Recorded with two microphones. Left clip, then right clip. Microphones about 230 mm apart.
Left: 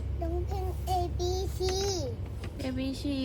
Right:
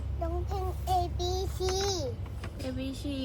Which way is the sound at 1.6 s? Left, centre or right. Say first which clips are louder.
Even; centre.